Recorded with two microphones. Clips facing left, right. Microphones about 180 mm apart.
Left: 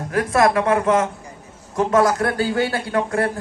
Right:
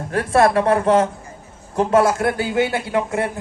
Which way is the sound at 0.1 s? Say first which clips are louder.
Right 1 dB; 30° right (ahead or behind).